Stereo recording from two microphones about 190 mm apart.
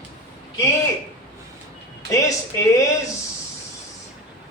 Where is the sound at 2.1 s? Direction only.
15° left (ahead or behind).